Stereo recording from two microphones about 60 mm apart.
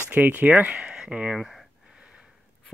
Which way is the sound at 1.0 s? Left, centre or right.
Centre.